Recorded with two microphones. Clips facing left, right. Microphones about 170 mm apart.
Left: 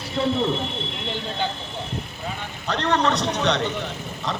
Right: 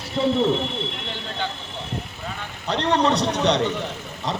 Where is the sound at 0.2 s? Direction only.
10° right (ahead or behind).